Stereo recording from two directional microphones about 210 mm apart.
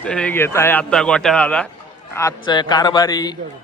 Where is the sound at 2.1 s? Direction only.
20° left (ahead or behind).